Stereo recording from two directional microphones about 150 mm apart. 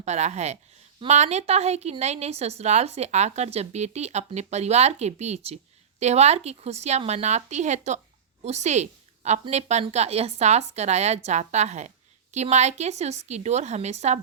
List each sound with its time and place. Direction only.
0.0 s a woman's voice: 50° right (ahead or behind)